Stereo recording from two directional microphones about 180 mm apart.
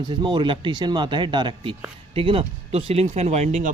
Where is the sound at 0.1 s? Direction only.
25° right (ahead or behind).